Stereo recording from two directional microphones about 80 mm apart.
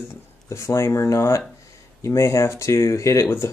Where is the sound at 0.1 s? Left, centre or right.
Left.